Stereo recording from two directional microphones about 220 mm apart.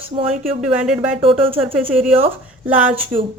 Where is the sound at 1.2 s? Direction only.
25° right (ahead or behind).